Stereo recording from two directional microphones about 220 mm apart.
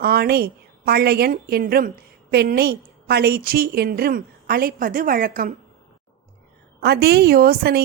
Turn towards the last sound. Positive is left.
turn(degrees=-45)  # may be behind; listen again after turning